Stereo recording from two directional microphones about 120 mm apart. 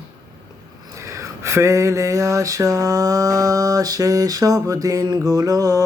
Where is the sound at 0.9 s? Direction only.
25° right (ahead or behind).